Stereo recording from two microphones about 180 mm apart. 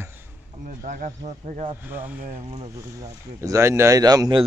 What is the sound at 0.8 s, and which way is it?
Speech, 45° right (ahead or behind).